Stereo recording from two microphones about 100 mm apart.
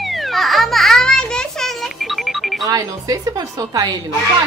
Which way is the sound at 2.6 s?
35° right (ahead or behind).